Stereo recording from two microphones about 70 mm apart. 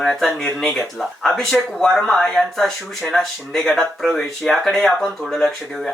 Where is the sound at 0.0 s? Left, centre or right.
Centre.